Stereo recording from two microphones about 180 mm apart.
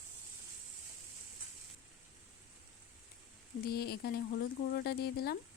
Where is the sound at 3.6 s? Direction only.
60° left (ahead or behind).